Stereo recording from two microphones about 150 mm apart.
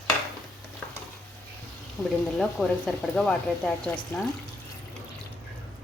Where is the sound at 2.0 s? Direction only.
5° left (ahead or behind).